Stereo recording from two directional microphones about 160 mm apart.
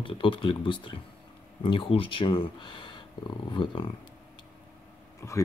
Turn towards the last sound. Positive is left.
turn(degrees=15)  # may be behind; listen again after turning